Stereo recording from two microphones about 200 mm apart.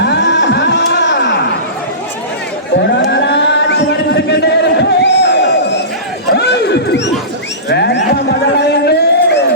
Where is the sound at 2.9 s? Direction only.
60° left (ahead or behind).